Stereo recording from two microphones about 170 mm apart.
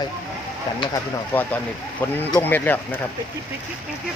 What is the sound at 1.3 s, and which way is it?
Speech, 10° left (ahead or behind).